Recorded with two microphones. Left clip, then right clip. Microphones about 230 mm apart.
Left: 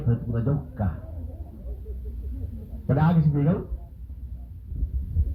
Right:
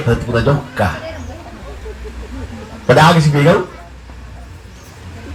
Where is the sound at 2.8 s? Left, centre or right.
Right.